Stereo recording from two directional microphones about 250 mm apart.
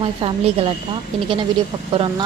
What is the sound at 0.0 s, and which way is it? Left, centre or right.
Speech, right.